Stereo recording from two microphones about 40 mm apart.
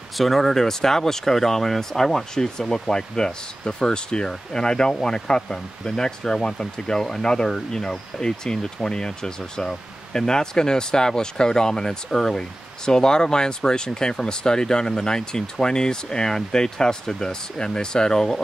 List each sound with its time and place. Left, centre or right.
0.2 s speech: centre